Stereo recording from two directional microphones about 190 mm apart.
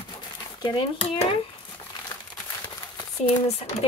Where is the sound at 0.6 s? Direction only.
25° left (ahead or behind).